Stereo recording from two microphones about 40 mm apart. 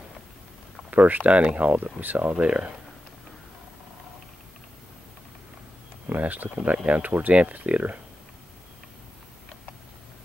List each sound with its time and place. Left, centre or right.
0.8 s speech: right
2.3 s speech: right
6.0 s speech: right